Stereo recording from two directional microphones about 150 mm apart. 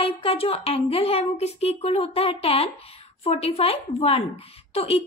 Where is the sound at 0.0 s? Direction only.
40° left (ahead or behind).